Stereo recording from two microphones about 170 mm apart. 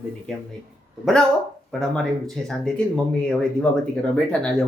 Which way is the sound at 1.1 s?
Centre (ahead or behind).